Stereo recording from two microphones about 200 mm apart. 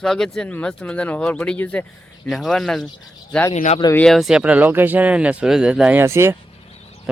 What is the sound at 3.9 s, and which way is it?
A man's voice, centre (ahead or behind).